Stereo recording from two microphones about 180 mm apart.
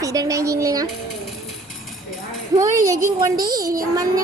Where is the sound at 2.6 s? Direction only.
20° right (ahead or behind).